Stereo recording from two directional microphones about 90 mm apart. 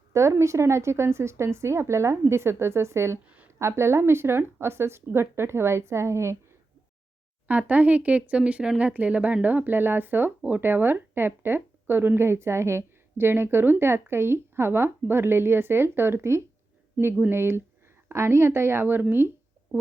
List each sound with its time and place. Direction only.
0.1 s speech: 35° right (ahead or behind)
7.4 s speech: 20° right (ahead or behind)